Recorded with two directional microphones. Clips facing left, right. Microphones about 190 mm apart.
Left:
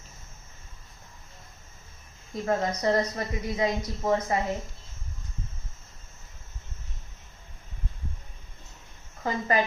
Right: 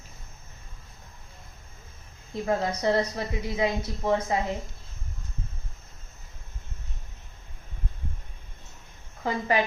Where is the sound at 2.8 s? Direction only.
5° right (ahead or behind).